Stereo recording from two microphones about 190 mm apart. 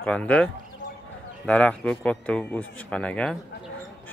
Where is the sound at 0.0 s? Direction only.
5° left (ahead or behind).